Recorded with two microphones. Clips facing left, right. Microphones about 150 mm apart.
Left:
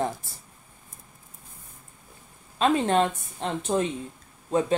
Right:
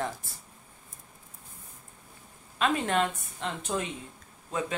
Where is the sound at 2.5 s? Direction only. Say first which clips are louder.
Left 5 dB; 30° left (ahead or behind).